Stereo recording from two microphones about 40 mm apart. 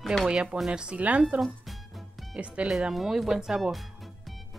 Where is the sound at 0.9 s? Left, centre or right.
Right.